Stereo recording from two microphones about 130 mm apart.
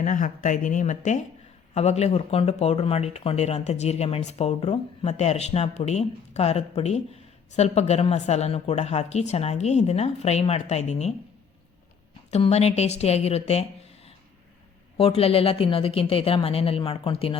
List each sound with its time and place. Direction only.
0.0 s speech: 85° left; by 1.2 s 65° left (ahead or behind)
1.7 s speech: 55° left (ahead or behind)
12.3 s speech: 55° left (ahead or behind)